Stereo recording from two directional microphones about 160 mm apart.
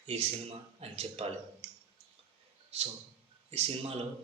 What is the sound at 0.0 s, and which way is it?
A man's voice, 40° right (ahead or behind).